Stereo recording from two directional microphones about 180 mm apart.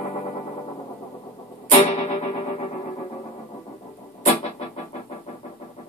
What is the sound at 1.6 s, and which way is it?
Music, 35° left (ahead or behind).